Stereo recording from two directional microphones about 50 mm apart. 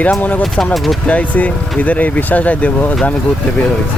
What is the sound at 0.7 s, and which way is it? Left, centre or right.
Speech, centre.